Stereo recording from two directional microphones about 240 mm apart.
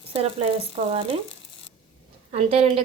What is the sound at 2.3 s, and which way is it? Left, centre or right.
Stir, right.